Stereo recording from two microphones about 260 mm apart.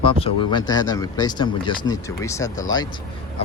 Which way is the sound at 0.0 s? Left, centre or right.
Centre.